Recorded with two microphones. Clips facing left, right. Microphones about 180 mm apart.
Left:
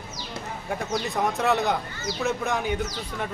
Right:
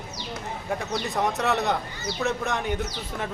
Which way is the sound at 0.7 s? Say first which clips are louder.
Left 1 dB; centre (ahead or behind).